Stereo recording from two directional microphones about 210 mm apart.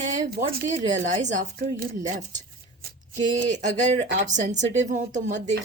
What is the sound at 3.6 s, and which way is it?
A woman's voice, 35° right (ahead or behind).